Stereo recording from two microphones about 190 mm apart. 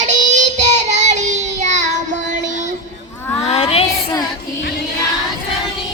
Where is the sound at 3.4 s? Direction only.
35° left (ahead or behind).